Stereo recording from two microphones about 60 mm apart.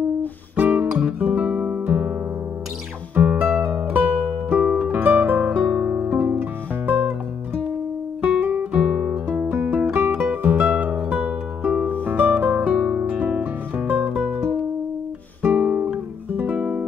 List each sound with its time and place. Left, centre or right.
0.6 s guitar: right
0.8 s guitar: centre
3.2 s music: right
5.7 s music: centre
6.9 s guitar: right
8.7 s guitar: centre
10.1 s music: right
10.7 s music: right
12.0 s harp: right; by 13.1 s centre
13.2 s music: right
15.4 s guitar: centre